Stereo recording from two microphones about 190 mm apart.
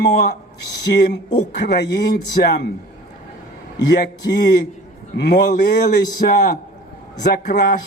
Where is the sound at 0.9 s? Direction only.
65° left (ahead or behind).